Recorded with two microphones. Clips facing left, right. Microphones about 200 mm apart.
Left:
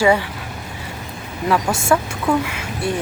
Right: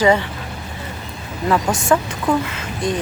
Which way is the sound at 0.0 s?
10° left (ahead or behind).